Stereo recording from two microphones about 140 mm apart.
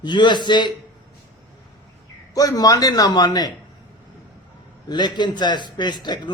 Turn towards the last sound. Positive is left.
turn(degrees=30)  # may be behind; listen again after turning